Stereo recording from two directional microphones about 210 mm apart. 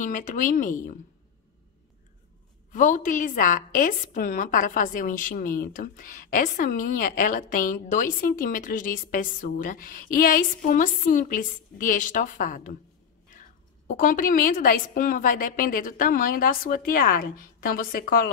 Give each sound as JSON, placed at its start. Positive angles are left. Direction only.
{"t": 0.0, "sound": "a woman's voice", "side_deg": 40}
{"t": 2.7, "sound": "a woman's voice", "side_deg": 40}